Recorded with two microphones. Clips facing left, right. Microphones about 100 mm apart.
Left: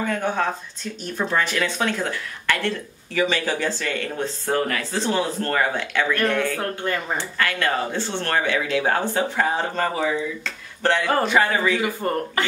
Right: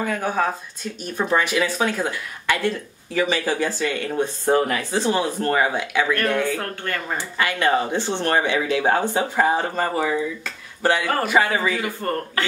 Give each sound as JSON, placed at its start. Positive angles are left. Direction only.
{"t": 0.0, "sound": "speech", "side_deg": -5}
{"t": 6.6, "sound": "speech", "side_deg": 15}
{"t": 7.2, "sound": "speech", "side_deg": -15}
{"t": 11.8, "sound": "speech", "side_deg": 15}